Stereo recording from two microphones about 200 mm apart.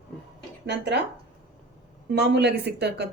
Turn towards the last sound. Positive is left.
turn(degrees=-55)  # may be behind; listen again after turning